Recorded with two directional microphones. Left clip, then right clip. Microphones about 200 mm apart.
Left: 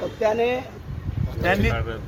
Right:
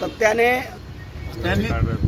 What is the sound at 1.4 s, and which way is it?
Speech, 10° left (ahead or behind).